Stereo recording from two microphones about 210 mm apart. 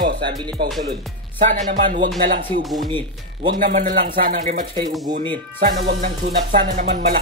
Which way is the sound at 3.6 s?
40° right (ahead or behind).